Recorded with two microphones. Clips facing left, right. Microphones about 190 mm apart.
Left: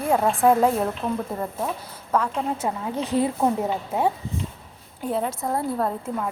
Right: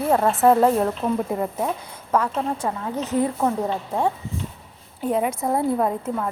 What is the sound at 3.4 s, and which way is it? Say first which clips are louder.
Speech: even; 5° left (ahead or behind).